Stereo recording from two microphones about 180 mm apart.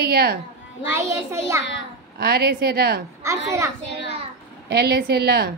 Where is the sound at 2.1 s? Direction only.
60° right (ahead or behind).